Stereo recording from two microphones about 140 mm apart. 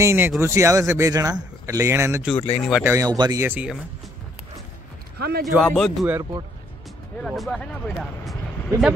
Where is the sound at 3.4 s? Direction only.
15° right (ahead or behind).